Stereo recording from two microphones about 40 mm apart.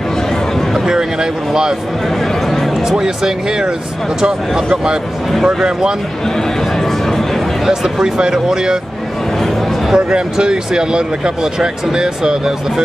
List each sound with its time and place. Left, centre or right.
0.8 s speech: centre
2.0 s a sound: centre
3.0 s speech: centre
5.4 s speech: centre
6.8 s speech: centre
7.6 s speech: centre
9.9 s speech: centre